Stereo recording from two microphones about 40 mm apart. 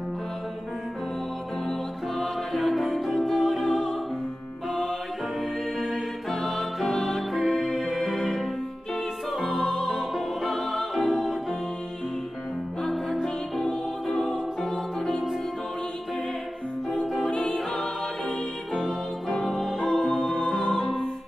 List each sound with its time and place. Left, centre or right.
1.7 s music: centre
6.3 s music: centre
9.5 s music: centre
12.9 s music: centre
13.7 s music: centre
17.3 s music: left
18.7 s music: centre